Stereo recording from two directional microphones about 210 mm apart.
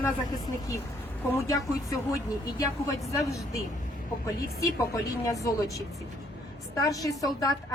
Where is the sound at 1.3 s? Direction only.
15° left (ahead or behind).